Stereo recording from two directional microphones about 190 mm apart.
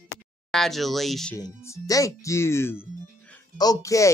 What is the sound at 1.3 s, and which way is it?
Speech, 15° left (ahead or behind).